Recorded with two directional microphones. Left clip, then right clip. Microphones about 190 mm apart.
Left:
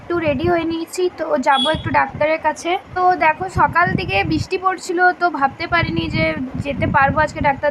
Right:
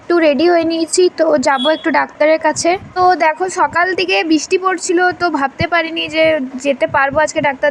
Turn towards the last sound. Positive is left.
turn(degrees=-20)  # may be behind; listen again after turning